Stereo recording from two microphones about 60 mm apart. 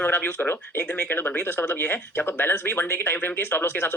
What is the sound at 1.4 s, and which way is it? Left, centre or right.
Speech, left.